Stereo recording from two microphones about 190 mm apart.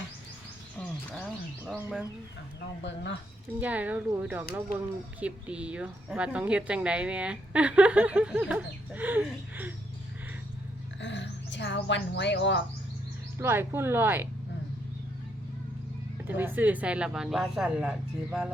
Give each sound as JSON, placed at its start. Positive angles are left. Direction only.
{"t": 1.1, "sound": "speech", "side_deg": -5}
{"t": 2.8, "sound": "speech", "side_deg": 70}
{"t": 3.6, "sound": "a woman's voice", "side_deg": -10}
{"t": 11.0, "sound": "speech", "side_deg": 70}
{"t": 13.4, "sound": "a woman's voice", "side_deg": -10}
{"t": 16.2, "sound": "speech", "side_deg": -10}